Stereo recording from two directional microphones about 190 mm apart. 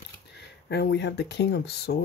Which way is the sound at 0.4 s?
60° left (ahead or behind).